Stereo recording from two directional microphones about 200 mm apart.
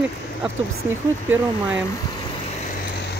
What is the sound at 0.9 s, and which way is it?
Speech, 10° right (ahead or behind).